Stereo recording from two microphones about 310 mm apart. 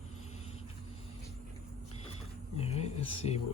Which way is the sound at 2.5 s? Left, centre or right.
Centre.